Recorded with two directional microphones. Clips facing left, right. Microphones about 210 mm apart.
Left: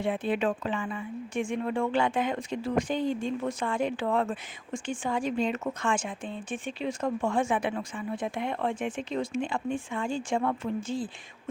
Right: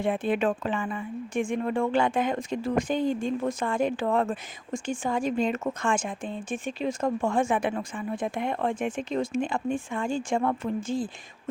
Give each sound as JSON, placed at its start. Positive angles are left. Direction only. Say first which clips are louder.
{"t": 0.0, "sound": "speech", "louder": "right 2 dB", "side_deg": -50}